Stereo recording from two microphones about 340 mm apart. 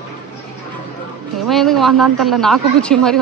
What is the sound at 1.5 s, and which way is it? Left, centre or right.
Speech, centre.